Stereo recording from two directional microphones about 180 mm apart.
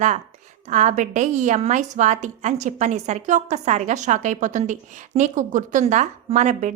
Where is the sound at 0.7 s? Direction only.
45° right (ahead or behind).